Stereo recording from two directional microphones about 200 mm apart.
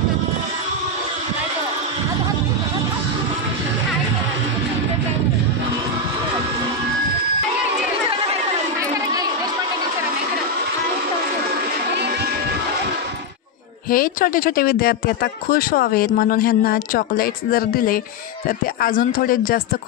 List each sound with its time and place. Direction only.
13.8 s speech: 45° left (ahead or behind)